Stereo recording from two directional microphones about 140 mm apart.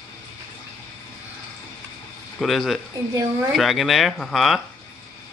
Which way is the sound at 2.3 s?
Centre (ahead or behind).